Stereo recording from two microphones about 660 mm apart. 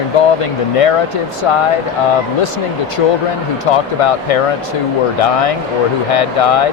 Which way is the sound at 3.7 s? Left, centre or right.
Left.